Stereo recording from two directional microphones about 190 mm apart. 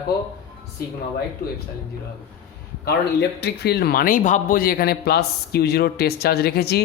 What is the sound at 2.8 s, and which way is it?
Speech, 60° left (ahead or behind).